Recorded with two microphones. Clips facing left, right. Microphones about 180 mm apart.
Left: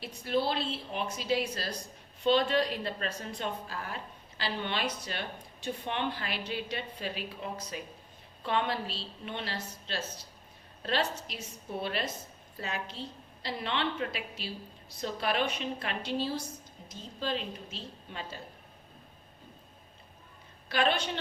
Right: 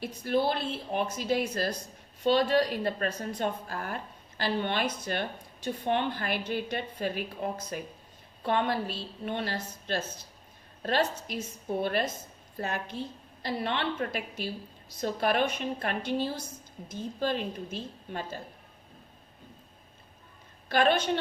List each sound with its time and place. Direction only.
0.0 s a woman's voice: 50° right (ahead or behind)
20.7 s a woman's voice: 50° right (ahead or behind)